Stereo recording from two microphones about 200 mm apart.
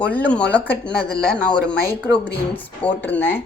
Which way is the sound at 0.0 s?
5° left (ahead or behind).